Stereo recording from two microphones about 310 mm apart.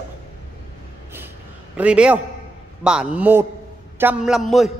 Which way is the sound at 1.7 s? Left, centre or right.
Centre.